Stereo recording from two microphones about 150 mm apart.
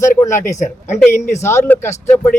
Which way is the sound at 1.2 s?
50° left (ahead or behind).